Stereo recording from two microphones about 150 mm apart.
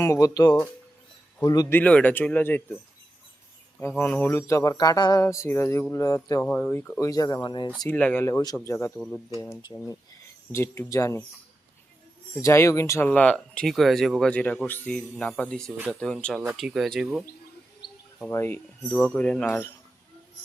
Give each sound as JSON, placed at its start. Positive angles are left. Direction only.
{"t": 0.0, "sound": "speech", "side_deg": 20}
{"t": 1.8, "sound": "speech", "side_deg": 10}
{"t": 3.8, "sound": "speech", "side_deg": 15}
{"t": 6.4, "sound": "speech", "side_deg": 10}
{"t": 7.9, "sound": "speech", "side_deg": 10}
{"t": 9.4, "sound": "speech", "side_deg": 25}
{"t": 12.4, "sound": "speech", "side_deg": 20}
{"t": 13.1, "sound": "speech", "side_deg": 5}
{"t": 17.8, "sound": "bird", "side_deg": 90}
{"t": 18.3, "sound": "speech", "side_deg": 15}